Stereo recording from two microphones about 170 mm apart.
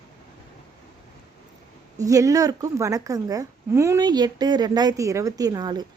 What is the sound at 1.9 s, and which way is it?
A woman's voice, 20° right (ahead or behind).